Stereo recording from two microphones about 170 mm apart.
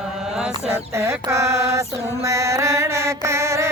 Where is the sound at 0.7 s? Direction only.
15° right (ahead or behind).